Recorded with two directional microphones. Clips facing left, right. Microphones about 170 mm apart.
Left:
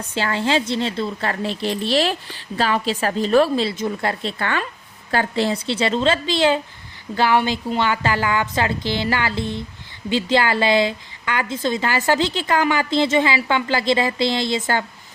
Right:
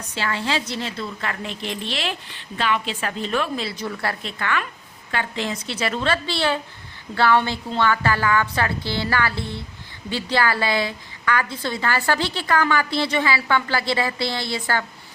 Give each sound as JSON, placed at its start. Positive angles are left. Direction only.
{"t": 0.1, "sound": "a woman's voice", "side_deg": 30}